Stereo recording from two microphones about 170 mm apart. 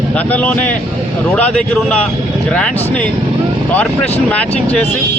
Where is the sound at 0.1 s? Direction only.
10° left (ahead or behind).